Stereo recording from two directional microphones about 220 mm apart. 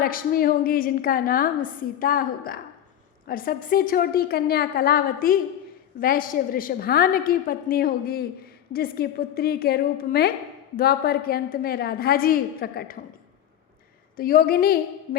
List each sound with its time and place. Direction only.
0.0 s a woman's voice: 40° left (ahead or behind)
14.2 s a woman's voice: 40° left (ahead or behind)